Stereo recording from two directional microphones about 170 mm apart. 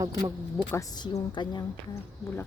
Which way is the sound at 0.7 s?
20° left (ahead or behind).